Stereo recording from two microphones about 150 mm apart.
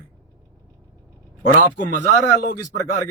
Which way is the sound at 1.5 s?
55° left (ahead or behind).